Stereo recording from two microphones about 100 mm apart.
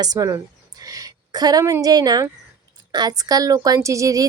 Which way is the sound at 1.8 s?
40° right (ahead or behind).